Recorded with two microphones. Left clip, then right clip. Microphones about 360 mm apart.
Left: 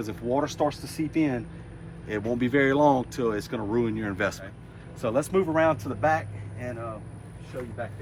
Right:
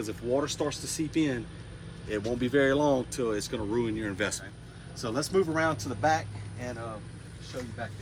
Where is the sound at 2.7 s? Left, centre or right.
Left.